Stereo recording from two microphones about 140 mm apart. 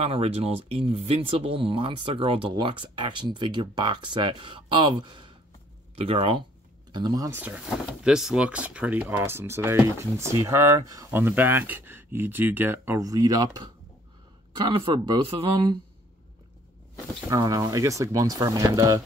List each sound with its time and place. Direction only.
0.0 s speech: 45° right (ahead or behind)
7.3 s speech: 10° right (ahead or behind); by 11.1 s 25° right (ahead or behind)
11.1 s speech: 15° right (ahead or behind); by 15.8 s 35° right (ahead or behind)
17.3 s speech: 25° right (ahead or behind)